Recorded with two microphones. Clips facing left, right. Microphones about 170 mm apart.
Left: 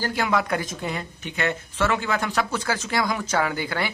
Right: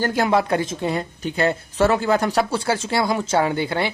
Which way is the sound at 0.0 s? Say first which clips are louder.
Right 5 dB; 45° right (ahead or behind).